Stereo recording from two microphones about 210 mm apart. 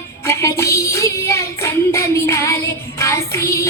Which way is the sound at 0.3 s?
15° left (ahead or behind).